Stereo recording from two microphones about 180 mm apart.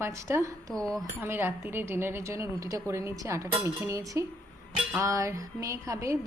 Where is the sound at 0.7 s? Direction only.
5° left (ahead or behind).